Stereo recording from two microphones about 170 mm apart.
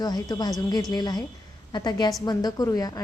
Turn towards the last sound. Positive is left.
turn(degrees=20)  # may be behind; listen again after turning